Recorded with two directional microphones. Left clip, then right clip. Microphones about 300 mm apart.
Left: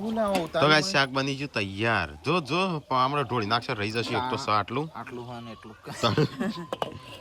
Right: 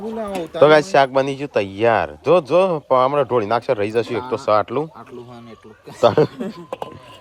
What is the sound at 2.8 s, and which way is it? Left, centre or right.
Speech, right.